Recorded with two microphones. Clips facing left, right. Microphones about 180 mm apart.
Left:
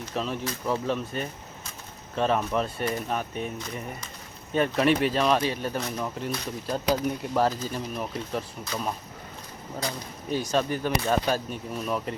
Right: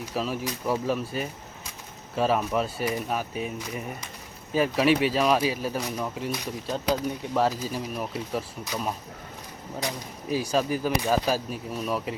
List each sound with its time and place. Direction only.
0.0 s speech: 5° right (ahead or behind)
10.2 s speech: 5° right (ahead or behind)